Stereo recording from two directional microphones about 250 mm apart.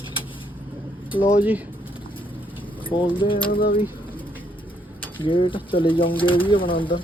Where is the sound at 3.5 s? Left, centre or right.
Left.